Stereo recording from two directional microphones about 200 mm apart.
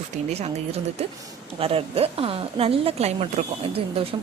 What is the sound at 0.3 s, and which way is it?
A woman's voice, 30° right (ahead or behind).